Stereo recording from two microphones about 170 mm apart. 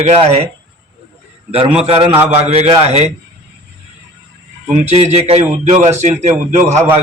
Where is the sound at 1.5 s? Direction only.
35° right (ahead or behind).